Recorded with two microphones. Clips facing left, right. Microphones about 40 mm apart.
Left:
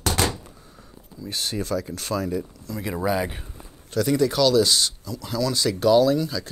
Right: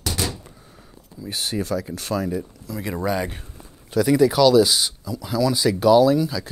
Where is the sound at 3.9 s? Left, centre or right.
Centre.